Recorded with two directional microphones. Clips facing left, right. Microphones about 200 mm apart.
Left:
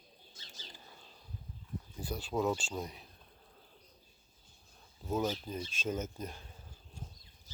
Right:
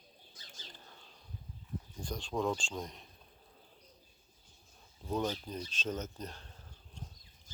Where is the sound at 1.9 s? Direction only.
5° left (ahead or behind).